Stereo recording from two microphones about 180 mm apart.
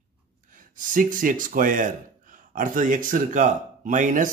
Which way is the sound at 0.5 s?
45° right (ahead or behind).